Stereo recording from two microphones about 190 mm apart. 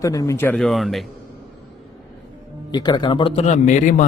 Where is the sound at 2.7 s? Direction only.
20° left (ahead or behind); by 4.1 s 40° left (ahead or behind).